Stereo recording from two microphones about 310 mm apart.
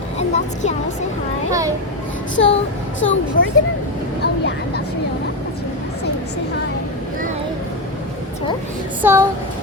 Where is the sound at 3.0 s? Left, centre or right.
Left.